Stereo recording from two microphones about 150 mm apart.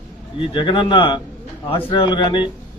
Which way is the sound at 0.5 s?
35° left (ahead or behind).